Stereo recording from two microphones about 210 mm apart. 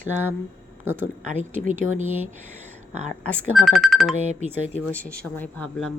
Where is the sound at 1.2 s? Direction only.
35° right (ahead or behind).